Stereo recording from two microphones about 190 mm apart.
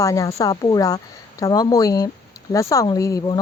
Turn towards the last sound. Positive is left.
turn(degrees=15)  # may be behind; listen again after turning